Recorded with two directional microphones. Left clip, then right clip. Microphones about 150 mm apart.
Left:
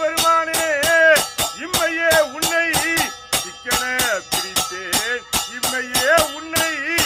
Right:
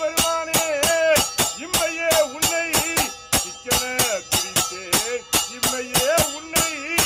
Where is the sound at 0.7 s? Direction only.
10° left (ahead or behind).